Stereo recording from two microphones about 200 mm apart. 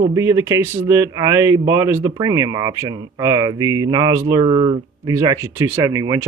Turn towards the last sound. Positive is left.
turn(degrees=-15)  # may be behind; listen again after turning